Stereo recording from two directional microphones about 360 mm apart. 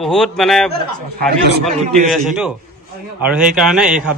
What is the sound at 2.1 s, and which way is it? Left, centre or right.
A man's voice, centre.